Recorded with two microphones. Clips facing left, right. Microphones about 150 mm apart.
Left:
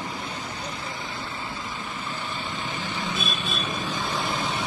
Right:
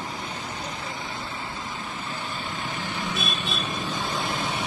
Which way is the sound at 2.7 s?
60° right (ahead or behind).